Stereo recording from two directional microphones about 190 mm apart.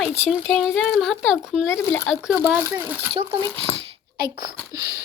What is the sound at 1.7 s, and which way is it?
Speech, 10° left (ahead or behind).